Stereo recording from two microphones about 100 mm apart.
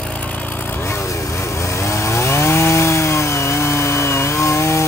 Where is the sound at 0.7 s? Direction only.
25° left (ahead or behind).